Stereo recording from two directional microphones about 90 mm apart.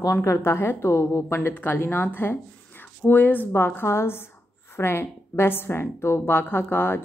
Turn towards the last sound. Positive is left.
turn(degrees=25)  # may be behind; listen again after turning